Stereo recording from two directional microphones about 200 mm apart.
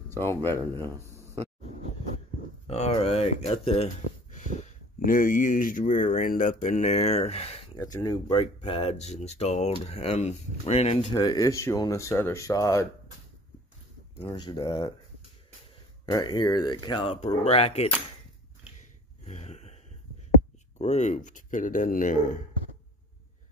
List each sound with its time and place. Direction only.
0.1 s speech: 10° left (ahead or behind)
2.6 s speech: 30° left (ahead or behind)
7.7 s speech: 20° left (ahead or behind)
14.2 s speech: 20° left (ahead or behind)
16.1 s speech: 20° left (ahead or behind)
19.2 s a sound: 35° left (ahead or behind)
20.7 s speech: 35° left (ahead or behind)